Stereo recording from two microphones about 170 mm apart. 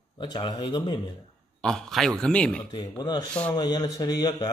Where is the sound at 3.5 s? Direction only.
25° left (ahead or behind).